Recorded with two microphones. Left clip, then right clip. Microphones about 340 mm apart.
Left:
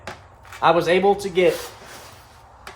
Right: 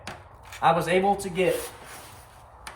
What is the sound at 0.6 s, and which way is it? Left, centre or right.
Speech, centre.